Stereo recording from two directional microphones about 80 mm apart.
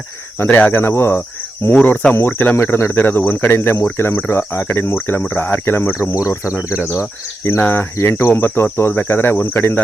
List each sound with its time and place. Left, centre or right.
0.4 s speech: left